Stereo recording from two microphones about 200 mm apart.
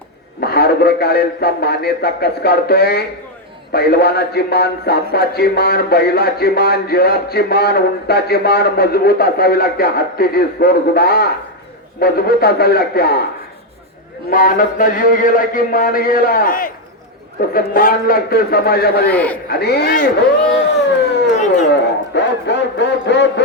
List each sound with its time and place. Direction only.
0.3 s speech: 50° left (ahead or behind)
14.3 s speech: 45° left (ahead or behind)
19.0 s a man's voice: 5° left (ahead or behind)
19.5 s speech: 55° left (ahead or behind)
21.3 s a sound: 35° left (ahead or behind)
21.7 s a sound: 60° left (ahead or behind)